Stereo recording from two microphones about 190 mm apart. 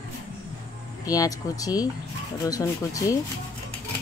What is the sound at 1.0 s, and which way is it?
Speech, 20° left (ahead or behind).